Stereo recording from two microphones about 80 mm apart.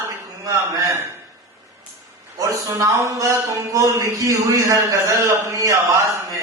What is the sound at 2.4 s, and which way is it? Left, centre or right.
A man's voice, right.